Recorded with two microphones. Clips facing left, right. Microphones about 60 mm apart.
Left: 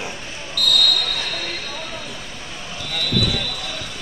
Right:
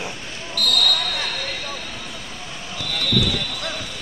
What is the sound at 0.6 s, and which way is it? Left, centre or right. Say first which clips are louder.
Speech: left 1 dB; right.